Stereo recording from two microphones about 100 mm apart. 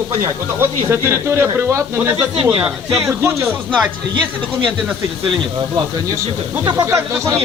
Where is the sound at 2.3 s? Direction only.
55° right (ahead or behind).